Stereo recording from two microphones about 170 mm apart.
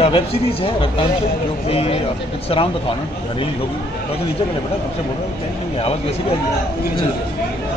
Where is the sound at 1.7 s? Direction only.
35° left (ahead or behind).